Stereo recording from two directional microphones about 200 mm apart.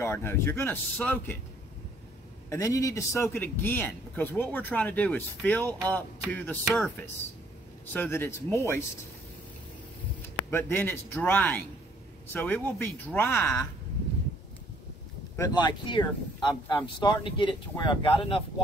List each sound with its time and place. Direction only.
0.0 s a man's voice: 10° left (ahead or behind)
2.5 s a man's voice: 15° left (ahead or behind)
10.5 s a man's voice: 10° left (ahead or behind)
15.3 s speech: 20° left (ahead or behind)